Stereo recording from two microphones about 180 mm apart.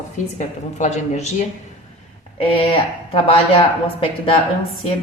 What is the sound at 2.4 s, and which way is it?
A woman's voice, 30° left (ahead or behind).